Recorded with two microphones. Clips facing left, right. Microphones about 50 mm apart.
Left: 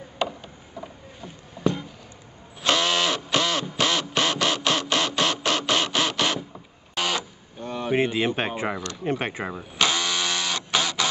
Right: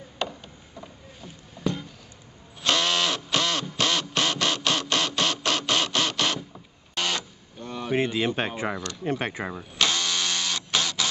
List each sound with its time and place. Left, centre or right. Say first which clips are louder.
0.2 s a sound: left 4 dB; centre
2.6 s printer: left 2 dB; centre
7.5 s speech: left 2 dB; centre
8.7 s speech: left 1 dB; centre
9.0 s speech: left 1 dB; left
9.4 s a sound: left 2 dB; centre